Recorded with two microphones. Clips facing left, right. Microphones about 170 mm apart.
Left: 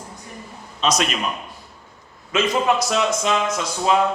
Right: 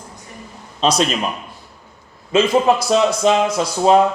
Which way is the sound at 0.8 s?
30° right (ahead or behind).